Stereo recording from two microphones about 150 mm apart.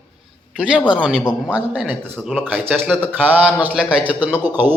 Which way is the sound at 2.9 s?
5° left (ahead or behind).